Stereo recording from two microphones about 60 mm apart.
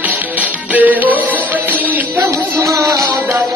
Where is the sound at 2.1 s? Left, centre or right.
Right.